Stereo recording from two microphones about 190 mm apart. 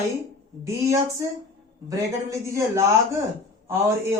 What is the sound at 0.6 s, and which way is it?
Speech, 15° right (ahead or behind).